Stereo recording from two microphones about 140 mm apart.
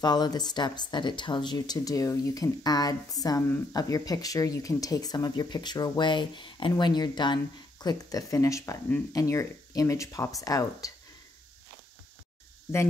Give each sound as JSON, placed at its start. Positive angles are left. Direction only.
{"t": 0.0, "sound": "speech", "side_deg": 30}